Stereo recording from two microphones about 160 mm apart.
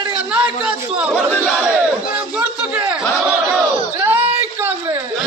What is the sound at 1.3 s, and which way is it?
Battle cry, 5° left (ahead or behind).